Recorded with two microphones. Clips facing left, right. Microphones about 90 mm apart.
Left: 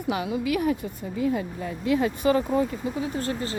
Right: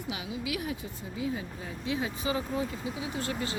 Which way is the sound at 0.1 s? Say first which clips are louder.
Left 10 dB; 50° left (ahead or behind).